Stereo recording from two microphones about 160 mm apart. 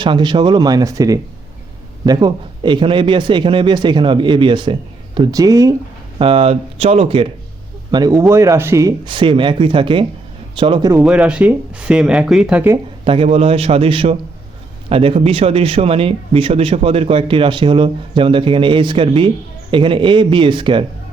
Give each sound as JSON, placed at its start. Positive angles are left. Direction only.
{"t": 0.0, "sound": "a man's voice", "side_deg": -30}
{"t": 6.1, "sound": "speech", "side_deg": -35}
{"t": 7.9, "sound": "a man's voice", "side_deg": -25}
{"t": 9.0, "sound": "a man's voice", "side_deg": -30}
{"t": 10.9, "sound": "speech", "side_deg": -5}
{"t": 13.1, "sound": "speech", "side_deg": -40}